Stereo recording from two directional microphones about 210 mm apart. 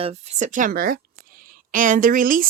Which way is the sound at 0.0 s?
30° right (ahead or behind).